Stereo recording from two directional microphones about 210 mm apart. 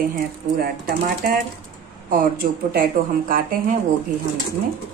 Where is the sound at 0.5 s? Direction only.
45° right (ahead or behind).